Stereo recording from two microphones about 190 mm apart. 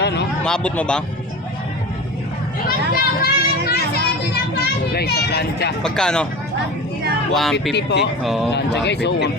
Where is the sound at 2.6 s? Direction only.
55° left (ahead or behind).